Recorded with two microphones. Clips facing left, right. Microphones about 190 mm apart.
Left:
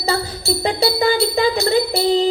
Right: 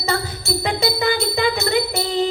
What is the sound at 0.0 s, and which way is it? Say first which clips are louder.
Jingle bell: left 3 dB; 35° left (ahead or behind).